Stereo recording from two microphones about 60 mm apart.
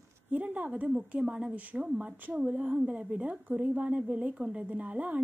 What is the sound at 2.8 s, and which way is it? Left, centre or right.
A woman's voice, centre.